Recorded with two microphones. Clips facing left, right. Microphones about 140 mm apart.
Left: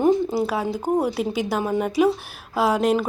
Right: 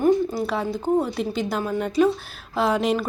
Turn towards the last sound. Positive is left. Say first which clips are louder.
# left 2 dB
turn(degrees=5)  # may be behind; listen again after turning